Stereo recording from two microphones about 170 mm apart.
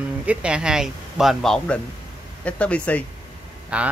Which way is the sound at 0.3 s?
5° right (ahead or behind).